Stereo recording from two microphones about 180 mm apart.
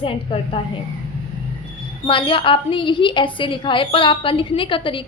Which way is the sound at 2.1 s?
30° left (ahead or behind).